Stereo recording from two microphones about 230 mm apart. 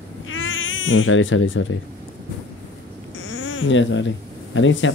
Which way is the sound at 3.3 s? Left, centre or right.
Left.